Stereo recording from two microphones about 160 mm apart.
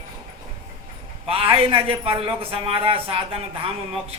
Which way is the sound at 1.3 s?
35° right (ahead or behind).